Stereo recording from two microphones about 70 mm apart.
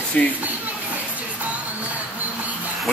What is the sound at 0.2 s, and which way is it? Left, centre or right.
Speech, centre.